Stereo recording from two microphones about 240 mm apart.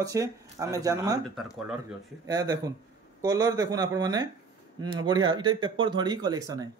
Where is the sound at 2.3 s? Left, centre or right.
Centre.